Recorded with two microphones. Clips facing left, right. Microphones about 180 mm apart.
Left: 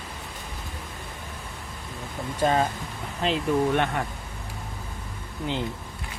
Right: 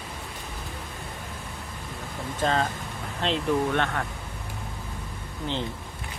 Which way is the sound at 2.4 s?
15° left (ahead or behind).